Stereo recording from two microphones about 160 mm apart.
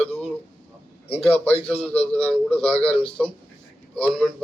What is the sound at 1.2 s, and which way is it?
Speech, 35° left (ahead or behind).